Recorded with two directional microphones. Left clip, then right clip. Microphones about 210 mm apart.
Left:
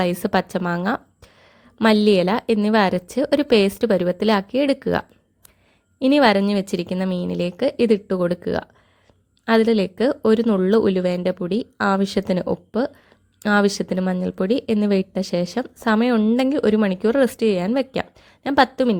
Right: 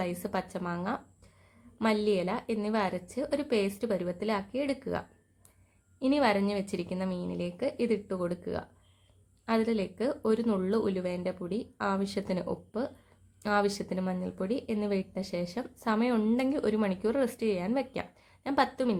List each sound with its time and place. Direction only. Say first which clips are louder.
0.0 s speech: left 13 dB; 40° left (ahead or behind)